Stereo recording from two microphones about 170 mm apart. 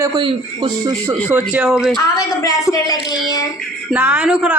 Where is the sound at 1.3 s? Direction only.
10° right (ahead or behind).